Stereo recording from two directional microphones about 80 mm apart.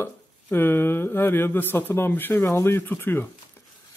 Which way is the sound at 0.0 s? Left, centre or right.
Left.